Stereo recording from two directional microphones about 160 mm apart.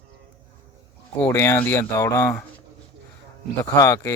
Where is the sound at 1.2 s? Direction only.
20° left (ahead or behind).